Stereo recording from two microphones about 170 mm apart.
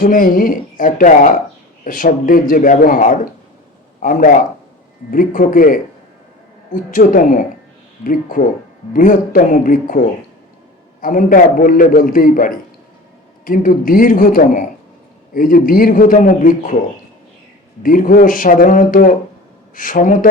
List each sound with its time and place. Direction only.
0.0 s a man's voice: 55° left (ahead or behind)
6.9 s a man's voice: 55° left (ahead or behind)
17.8 s a man's voice: 55° left (ahead or behind)